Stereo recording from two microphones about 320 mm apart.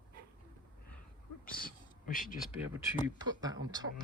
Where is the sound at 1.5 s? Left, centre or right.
Left.